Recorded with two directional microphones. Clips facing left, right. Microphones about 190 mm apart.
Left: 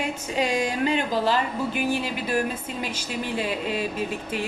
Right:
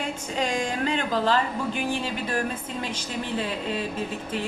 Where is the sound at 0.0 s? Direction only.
10° left (ahead or behind).